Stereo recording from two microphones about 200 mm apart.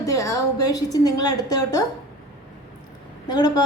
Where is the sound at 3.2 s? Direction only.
20° left (ahead or behind).